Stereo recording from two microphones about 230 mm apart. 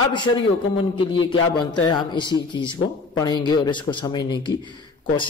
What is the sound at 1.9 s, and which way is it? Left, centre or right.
Speech, centre.